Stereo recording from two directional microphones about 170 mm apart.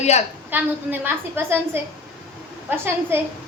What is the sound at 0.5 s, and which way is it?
A woman's voice, 10° right (ahead or behind).